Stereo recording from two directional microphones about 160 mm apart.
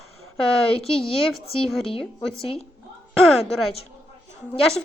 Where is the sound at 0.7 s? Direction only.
35° left (ahead or behind).